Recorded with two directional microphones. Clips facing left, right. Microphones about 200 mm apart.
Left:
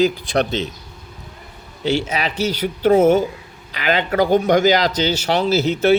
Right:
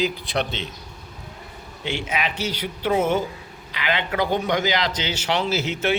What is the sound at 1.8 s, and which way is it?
Speech, 40° left (ahead or behind).